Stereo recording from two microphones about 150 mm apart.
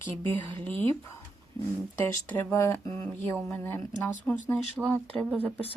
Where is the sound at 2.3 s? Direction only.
20° left (ahead or behind).